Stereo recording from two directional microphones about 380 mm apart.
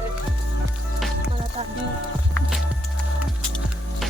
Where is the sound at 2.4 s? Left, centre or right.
Centre.